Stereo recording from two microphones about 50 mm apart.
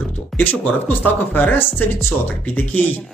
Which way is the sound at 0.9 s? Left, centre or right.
Left.